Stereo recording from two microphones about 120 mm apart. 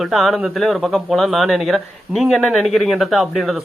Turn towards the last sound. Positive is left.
turn(degrees=0)  # may be behind; listen again after turning